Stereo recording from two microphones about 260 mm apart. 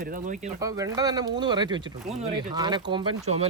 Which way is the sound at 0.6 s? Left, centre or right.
Centre.